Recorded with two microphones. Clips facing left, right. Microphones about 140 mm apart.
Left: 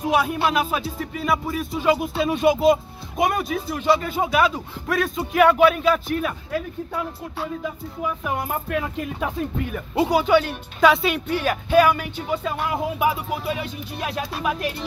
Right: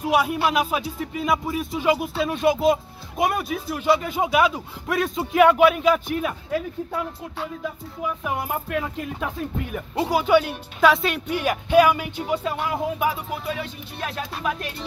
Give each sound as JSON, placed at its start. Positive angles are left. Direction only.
{"t": 0.0, "sound": "speech", "side_deg": -10}
{"t": 2.1, "sound": "speech", "side_deg": 5}
{"t": 5.5, "sound": "speech", "side_deg": -10}
{"t": 8.2, "sound": "speech", "side_deg": -5}
{"t": 8.7, "sound": "speech", "side_deg": 5}
{"t": 11.2, "sound": "speech", "side_deg": -15}
{"t": 12.6, "sound": "music", "side_deg": 10}